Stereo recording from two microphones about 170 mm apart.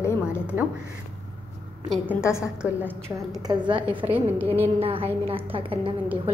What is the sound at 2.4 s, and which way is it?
Speech, 5° right (ahead or behind).